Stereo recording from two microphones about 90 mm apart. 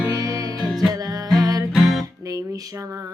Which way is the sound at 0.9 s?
45° right (ahead or behind).